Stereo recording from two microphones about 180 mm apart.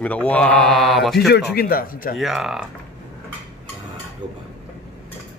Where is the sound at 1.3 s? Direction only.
55° left (ahead or behind).